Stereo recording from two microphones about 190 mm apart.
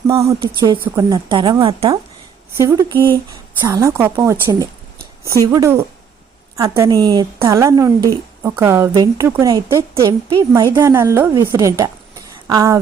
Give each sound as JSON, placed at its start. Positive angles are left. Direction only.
{"t": 0.1, "sound": "a woman's voice", "side_deg": -15}